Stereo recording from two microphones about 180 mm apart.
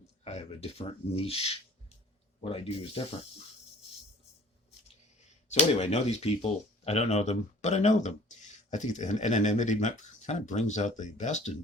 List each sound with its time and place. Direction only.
0.3 s speech: 35° left (ahead or behind)
5.5 s speech: 40° left (ahead or behind)